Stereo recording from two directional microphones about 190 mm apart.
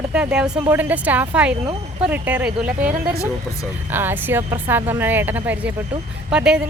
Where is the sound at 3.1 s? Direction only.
15° left (ahead or behind).